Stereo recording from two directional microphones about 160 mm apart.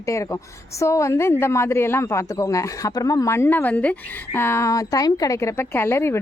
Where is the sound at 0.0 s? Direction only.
20° left (ahead or behind).